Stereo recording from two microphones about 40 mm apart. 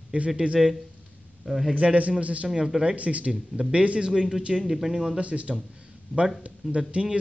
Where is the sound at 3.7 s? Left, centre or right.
Right.